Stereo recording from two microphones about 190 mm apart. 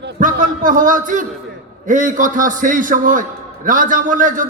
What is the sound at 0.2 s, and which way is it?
A man's voice, 45° right (ahead or behind).